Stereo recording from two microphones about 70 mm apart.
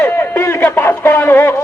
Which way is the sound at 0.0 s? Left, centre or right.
Left.